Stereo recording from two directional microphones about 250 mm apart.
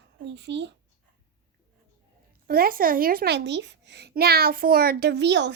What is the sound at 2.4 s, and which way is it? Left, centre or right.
A child's voice, right.